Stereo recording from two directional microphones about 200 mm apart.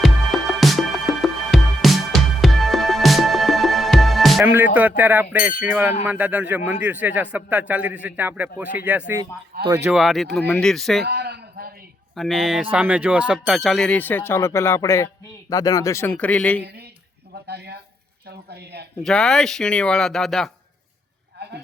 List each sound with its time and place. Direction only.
0.0 s music: centre (ahead or behind)
6.0 s speech: 10° right (ahead or behind)
9.9 s speech: centre (ahead or behind)
11.0 s a sound: 55° right (ahead or behind)
12.1 s speech: centre (ahead or behind)
17.4 s speech: 55° right (ahead or behind)
19.0 s speech: 5° left (ahead or behind)